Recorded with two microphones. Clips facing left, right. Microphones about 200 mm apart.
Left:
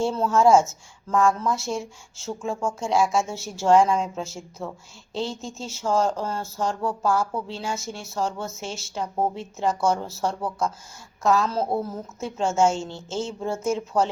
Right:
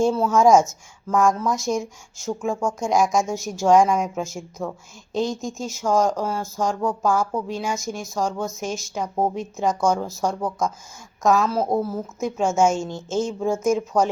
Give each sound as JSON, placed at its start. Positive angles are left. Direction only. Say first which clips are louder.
{"t": 0.0, "sound": "a woman's voice", "louder": "right 3 dB", "side_deg": -10}